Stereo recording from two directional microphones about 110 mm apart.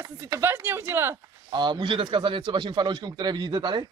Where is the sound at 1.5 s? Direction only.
45° right (ahead or behind).